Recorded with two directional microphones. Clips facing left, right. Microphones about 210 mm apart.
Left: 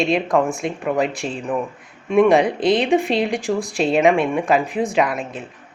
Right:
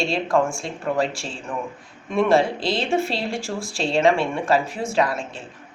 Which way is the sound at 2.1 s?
15° left (ahead or behind).